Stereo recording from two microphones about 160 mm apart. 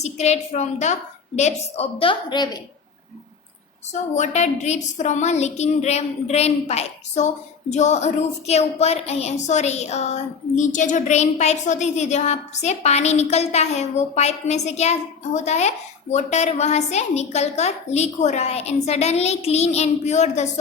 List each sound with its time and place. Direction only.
0.0 s a woman's voice: 45° left (ahead or behind); by 2.6 s 25° left (ahead or behind)
4.1 s a woman's voice: 45° left (ahead or behind)